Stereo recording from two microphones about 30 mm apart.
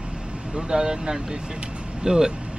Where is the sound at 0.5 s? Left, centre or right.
Right.